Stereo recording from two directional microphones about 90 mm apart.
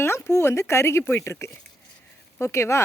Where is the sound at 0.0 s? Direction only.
30° left (ahead or behind).